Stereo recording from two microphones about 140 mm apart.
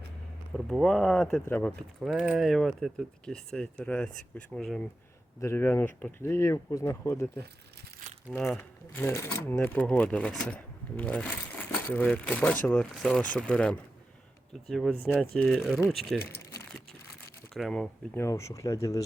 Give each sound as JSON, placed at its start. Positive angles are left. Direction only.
{"t": 0.5, "sound": "speech", "side_deg": 0}
{"t": 2.0, "sound": "speech", "side_deg": -5}
{"t": 5.4, "sound": "speech", "side_deg": 20}
{"t": 16.4, "sound": "crumpling", "side_deg": 20}
{"t": 17.5, "sound": "speech", "side_deg": 5}
{"t": 18.1, "sound": "speech", "side_deg": 20}